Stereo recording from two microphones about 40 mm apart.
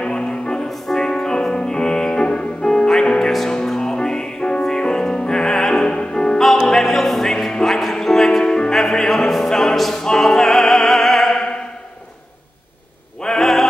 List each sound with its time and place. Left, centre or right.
0.0 s music: left
10.0 s opera: centre
13.2 s a sound: centre